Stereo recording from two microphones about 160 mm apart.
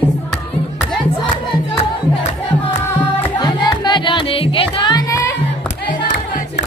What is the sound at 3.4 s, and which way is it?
Music, 30° left (ahead or behind).